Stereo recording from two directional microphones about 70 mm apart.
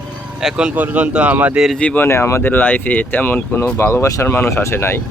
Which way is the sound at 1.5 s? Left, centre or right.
Centre.